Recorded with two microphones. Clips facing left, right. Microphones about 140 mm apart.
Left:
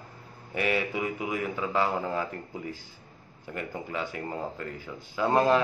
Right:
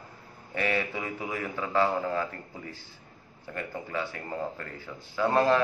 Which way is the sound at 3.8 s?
15° left (ahead or behind).